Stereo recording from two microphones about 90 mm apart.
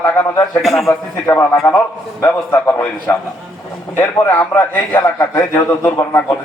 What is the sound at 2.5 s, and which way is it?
Speech, 15° left (ahead or behind).